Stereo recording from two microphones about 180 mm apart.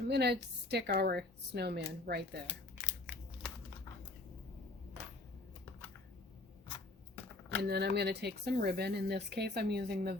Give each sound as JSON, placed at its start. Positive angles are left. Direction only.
{"t": 0.1, "sound": "speech", "side_deg": -65}
{"t": 2.8, "sound": "crushing", "side_deg": -10}
{"t": 7.7, "sound": "speech", "side_deg": -65}